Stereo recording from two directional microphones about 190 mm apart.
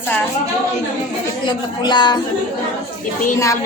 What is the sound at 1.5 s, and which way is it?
Speech, 25° left (ahead or behind).